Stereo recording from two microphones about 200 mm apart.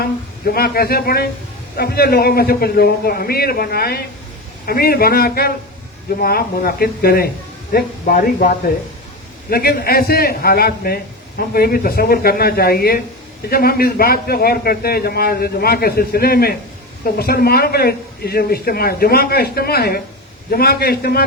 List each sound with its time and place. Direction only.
0.0 s a man's voice: 50° left (ahead or behind)